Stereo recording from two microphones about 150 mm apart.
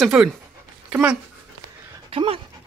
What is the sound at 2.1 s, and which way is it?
Speech, 35° right (ahead or behind).